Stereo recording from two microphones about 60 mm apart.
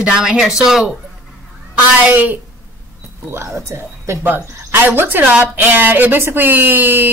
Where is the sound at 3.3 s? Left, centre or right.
Right.